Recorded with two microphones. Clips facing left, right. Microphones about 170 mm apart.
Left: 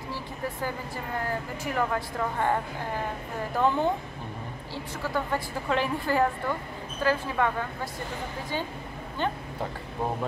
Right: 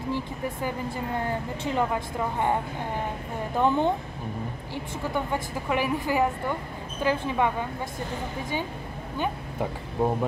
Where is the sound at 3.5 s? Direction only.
20° right (ahead or behind).